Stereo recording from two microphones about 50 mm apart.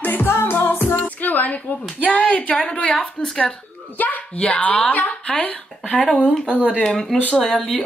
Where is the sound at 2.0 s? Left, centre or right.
Left.